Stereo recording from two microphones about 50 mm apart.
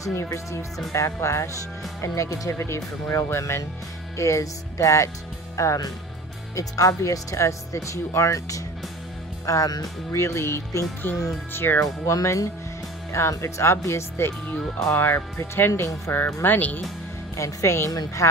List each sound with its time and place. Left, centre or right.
0.1 s speech: left
0.9 s speech: left
4.2 s speech: left
10.1 s speech: left
11.5 s speech: left
11.8 s speech: left
14.9 s speech: left
16.4 s speech: left
17.4 s speech: left